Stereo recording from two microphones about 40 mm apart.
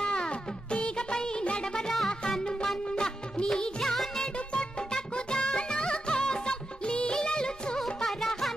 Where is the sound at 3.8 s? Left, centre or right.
Centre.